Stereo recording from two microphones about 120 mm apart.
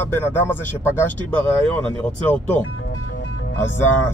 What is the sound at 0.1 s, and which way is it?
Speech, 20° left (ahead or behind).